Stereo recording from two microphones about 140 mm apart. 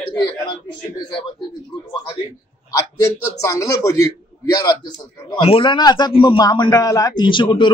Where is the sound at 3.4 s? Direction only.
25° left (ahead or behind).